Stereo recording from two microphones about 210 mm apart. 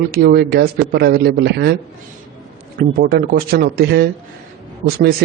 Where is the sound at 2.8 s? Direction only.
45° right (ahead or behind).